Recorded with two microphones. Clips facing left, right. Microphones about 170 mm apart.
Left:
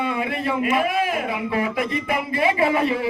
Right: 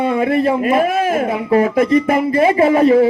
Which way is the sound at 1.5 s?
45° right (ahead or behind).